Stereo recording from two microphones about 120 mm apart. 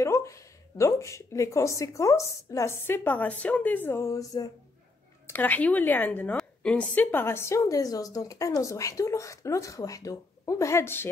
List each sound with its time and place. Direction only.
0.0 s a woman's voice: 25° left (ahead or behind)
5.3 s a woman's voice: 15° left (ahead or behind)